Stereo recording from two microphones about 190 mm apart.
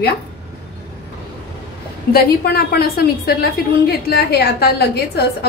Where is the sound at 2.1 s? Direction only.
55° left (ahead or behind).